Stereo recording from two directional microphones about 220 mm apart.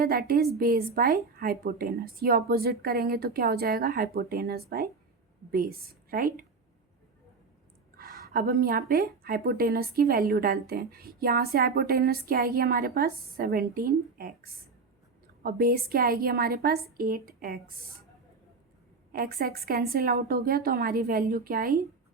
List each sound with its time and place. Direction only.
0.0 s a woman's voice: 45° right (ahead or behind)
7.9 s a woman's voice: 40° right (ahead or behind)
19.1 s a woman's voice: 40° right (ahead or behind)